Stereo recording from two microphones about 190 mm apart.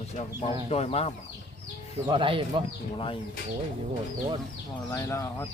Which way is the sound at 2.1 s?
25° right (ahead or behind).